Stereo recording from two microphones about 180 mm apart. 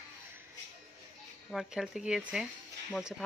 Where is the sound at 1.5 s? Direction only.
Centre (ahead or behind).